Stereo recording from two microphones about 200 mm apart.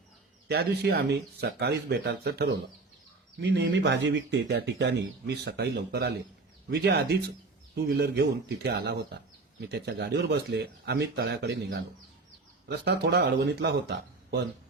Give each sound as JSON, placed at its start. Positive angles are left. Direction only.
{"t": 0.4, "sound": "speech", "side_deg": -55}